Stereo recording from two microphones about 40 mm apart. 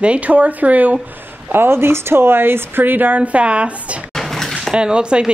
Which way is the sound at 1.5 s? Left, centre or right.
Right.